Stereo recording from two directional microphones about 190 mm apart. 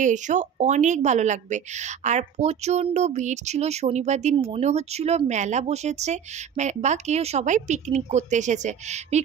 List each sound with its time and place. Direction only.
0.0 s a woman's voice: 40° right (ahead or behind)